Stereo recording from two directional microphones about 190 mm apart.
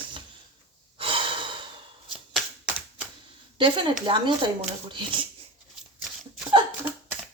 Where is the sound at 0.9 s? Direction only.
30° right (ahead or behind).